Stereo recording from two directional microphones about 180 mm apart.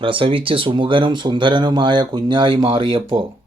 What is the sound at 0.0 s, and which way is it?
Speech, 30° right (ahead or behind).